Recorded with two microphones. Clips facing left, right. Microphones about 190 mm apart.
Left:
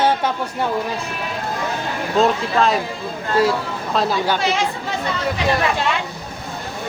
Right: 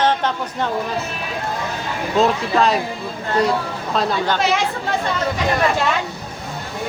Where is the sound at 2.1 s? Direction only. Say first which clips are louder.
Even; centre (ahead or behind).